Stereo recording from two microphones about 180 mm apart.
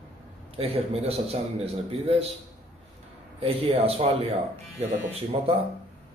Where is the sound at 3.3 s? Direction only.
35° right (ahead or behind).